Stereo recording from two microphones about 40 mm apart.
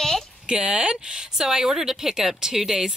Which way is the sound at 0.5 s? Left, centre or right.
Right.